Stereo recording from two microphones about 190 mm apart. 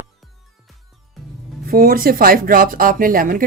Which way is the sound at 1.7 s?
50° right (ahead or behind).